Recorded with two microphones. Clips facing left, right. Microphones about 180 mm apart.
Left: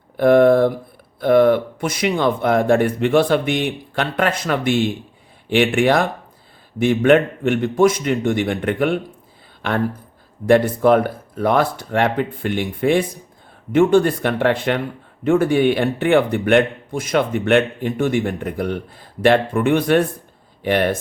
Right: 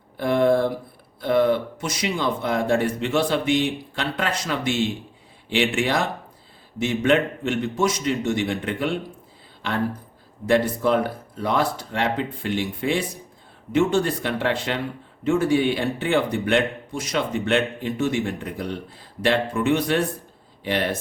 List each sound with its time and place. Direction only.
0.2 s speech: 55° left (ahead or behind)
10.4 s speech: 55° left (ahead or behind)